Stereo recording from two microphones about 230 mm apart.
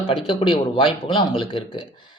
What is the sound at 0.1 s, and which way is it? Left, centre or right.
A man's voice, left.